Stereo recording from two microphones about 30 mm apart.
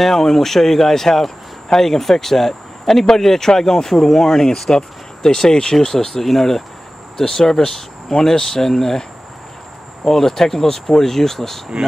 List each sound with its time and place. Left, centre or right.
0.0 s speech: centre
4.6 s speech: centre
10.0 s speech: centre